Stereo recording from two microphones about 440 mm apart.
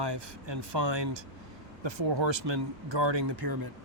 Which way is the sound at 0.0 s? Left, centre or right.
Right.